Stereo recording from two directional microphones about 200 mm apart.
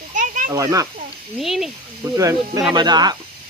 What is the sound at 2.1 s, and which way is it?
Speech, 15° right (ahead or behind).